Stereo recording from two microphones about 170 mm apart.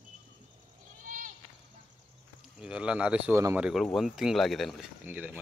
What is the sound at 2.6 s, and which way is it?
Speech, 5° right (ahead or behind).